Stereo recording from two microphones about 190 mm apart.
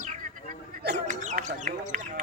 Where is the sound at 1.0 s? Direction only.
40° right (ahead or behind).